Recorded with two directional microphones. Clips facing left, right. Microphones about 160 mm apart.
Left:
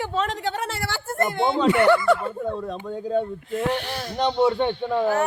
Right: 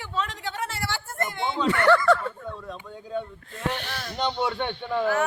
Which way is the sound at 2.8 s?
45° left (ahead or behind).